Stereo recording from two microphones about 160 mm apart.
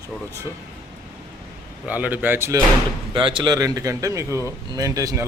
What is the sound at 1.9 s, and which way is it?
Speech, 10° right (ahead or behind).